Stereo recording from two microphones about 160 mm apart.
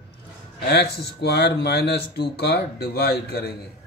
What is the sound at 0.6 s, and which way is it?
Speech, 90° left.